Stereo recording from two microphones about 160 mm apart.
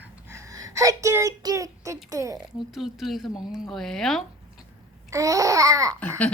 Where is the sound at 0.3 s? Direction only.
20° right (ahead or behind).